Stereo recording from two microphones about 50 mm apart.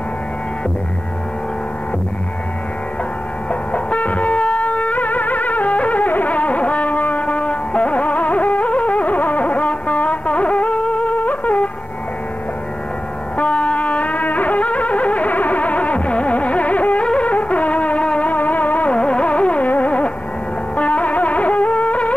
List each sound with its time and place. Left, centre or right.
3.7 s music: left
13.4 s music: left
18.9 s music: left